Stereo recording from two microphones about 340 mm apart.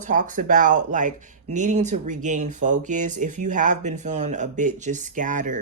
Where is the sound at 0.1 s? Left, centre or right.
Right.